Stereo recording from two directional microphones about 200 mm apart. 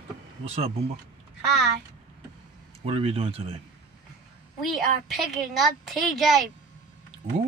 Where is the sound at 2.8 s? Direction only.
30° right (ahead or behind).